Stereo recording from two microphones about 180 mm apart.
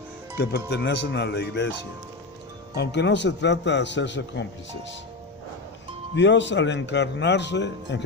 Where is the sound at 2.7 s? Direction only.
75° left (ahead or behind).